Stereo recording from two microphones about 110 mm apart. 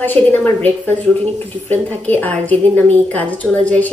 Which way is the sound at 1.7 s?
15° left (ahead or behind).